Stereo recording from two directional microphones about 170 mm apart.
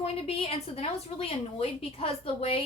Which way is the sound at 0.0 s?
35° left (ahead or behind).